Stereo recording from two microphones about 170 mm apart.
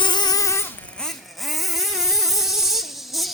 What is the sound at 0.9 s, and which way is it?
Electric toothbrush, centre (ahead or behind).